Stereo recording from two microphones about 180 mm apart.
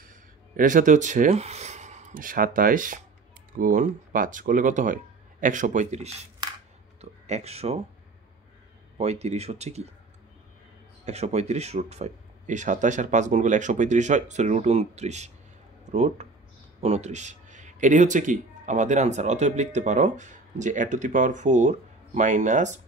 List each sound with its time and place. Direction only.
0.1 s speech: 50° right (ahead or behind)
7.0 s a sound: 35° right (ahead or behind)
8.9 s speech: 35° right (ahead or behind)
11.1 s speech: 40° right (ahead or behind)